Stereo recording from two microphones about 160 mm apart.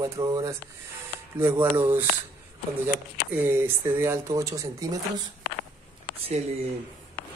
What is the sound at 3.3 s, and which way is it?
Speech, 15° right (ahead or behind).